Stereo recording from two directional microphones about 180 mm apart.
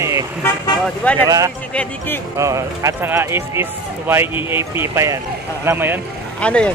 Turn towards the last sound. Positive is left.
turn(degrees=5)  # may be behind; listen again after turning